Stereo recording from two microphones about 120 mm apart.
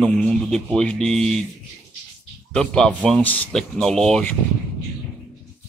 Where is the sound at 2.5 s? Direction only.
5° left (ahead or behind).